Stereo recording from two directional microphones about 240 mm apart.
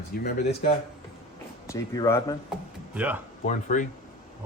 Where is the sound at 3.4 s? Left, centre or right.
Left.